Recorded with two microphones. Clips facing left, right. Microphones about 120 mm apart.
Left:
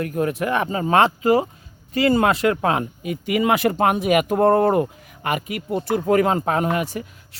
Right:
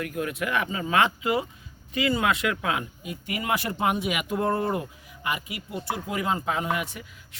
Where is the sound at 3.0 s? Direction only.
80° left.